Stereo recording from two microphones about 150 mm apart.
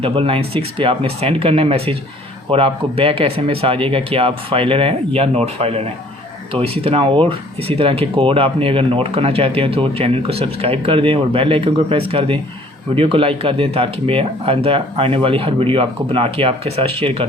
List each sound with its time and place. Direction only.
0.0 s speech: 40° right (ahead or behind)